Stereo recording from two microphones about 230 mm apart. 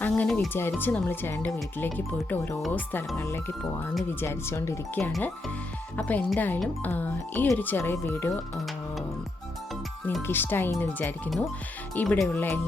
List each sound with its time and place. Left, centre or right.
0.0 s speech: centre
10.1 s speech: centre